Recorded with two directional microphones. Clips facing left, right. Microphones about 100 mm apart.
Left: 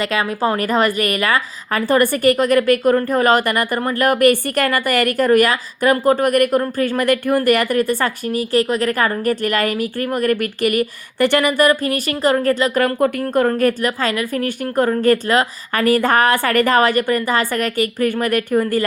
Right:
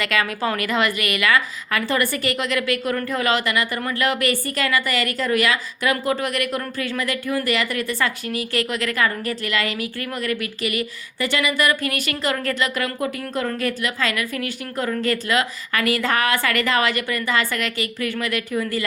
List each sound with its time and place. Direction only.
0.0 s a woman's voice: 35° left (ahead or behind)
14.4 s a woman's voice: 45° left (ahead or behind)